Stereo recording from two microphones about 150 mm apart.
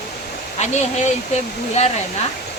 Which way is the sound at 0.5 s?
50° left (ahead or behind).